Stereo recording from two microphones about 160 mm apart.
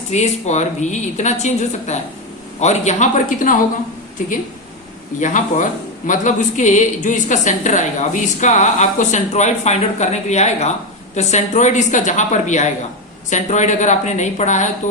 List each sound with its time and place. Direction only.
0.1 s a woman's voice: 45° left (ahead or behind)